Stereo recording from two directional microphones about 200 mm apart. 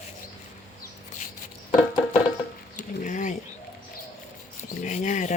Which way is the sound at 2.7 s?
40° left (ahead or behind).